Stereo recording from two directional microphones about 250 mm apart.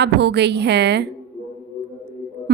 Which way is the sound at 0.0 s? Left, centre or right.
Right.